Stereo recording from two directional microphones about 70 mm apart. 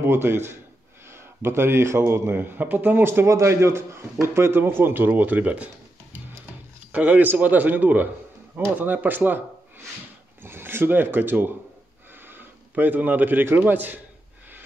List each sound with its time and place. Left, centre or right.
0.0 s speech: right
6.9 s speech: right
10.4 s a man's voice: right